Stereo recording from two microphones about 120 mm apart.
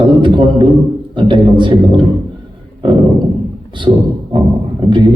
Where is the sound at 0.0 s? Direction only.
40° right (ahead or behind).